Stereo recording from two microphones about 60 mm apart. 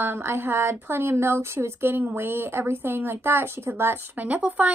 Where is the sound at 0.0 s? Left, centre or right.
Right.